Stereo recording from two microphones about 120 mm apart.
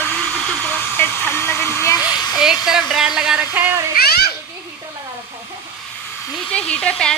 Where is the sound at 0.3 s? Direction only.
10° left (ahead or behind).